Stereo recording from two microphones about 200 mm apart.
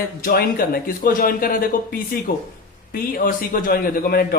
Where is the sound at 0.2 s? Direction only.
50° left (ahead or behind).